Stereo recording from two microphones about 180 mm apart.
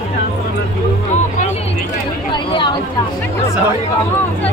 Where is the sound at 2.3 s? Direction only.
25° left (ahead or behind).